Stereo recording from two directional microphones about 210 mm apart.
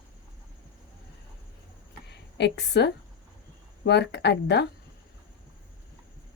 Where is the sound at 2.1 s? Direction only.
55° left (ahead or behind).